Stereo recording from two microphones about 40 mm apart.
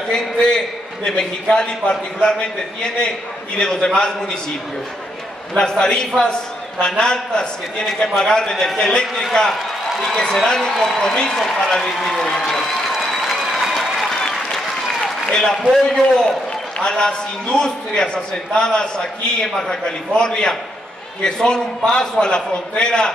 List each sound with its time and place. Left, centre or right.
0.1 s a man's voice: centre
5.6 s a man's voice: centre
11.3 s a man's voice: centre
12.2 s a man's voice: centre
12.9 s applause: centre
15.2 s a man's voice: centre